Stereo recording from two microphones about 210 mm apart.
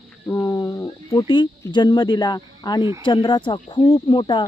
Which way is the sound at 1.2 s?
20° left (ahead or behind).